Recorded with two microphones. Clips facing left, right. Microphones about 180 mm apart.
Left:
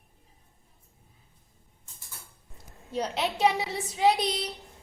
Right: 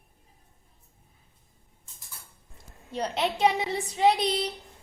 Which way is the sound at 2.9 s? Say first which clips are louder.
Right 1 dB; centre (ahead or behind).